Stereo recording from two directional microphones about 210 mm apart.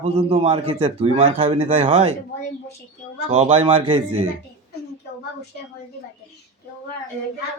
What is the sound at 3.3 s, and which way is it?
Speech, 30° right (ahead or behind).